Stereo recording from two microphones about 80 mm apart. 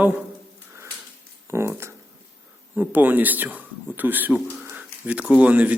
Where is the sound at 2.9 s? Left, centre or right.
Right.